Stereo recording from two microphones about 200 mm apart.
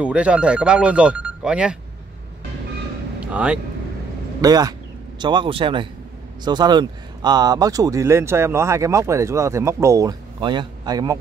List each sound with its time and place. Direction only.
0.0 s speech: 5° right (ahead or behind)
3.2 s vehicle: 5° right (ahead or behind)
4.4 s a man's voice: 20° right (ahead or behind)